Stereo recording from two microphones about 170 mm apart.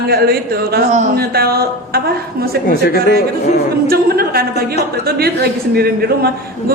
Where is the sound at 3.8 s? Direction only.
65° right (ahead or behind).